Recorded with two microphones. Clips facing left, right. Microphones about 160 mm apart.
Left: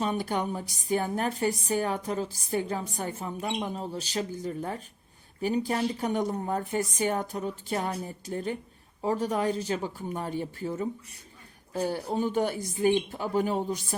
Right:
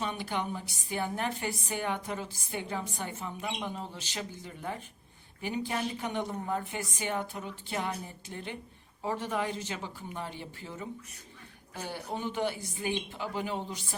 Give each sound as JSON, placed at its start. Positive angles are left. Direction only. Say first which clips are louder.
{"t": 0.0, "sound": "a woman's voice", "louder": "left 5 dB", "side_deg": 40}